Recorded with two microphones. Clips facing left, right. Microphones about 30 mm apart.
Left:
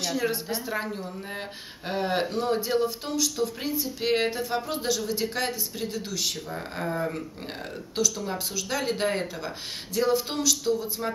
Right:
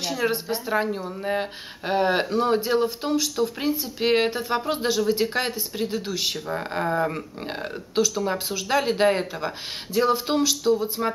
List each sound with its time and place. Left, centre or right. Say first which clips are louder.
0.0 s speech: right 3 dB; centre